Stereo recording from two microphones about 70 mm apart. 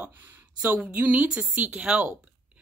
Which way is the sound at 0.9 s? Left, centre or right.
Right.